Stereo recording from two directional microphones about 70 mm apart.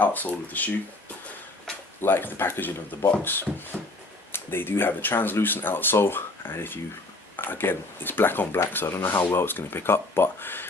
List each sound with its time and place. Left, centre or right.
0.0 s speech: left
2.0 s speech: left